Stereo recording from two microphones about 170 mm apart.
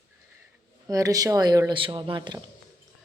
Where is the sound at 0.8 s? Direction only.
20° right (ahead or behind).